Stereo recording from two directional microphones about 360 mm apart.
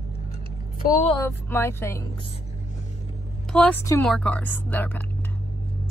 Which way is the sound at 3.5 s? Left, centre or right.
Centre.